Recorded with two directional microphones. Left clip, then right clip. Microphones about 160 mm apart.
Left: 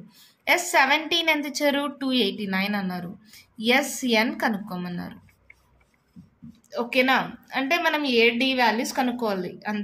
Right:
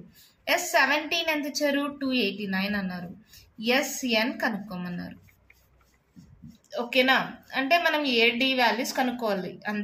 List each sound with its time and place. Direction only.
0.5 s a woman's voice: 45° left (ahead or behind)
6.7 s a woman's voice: 30° left (ahead or behind)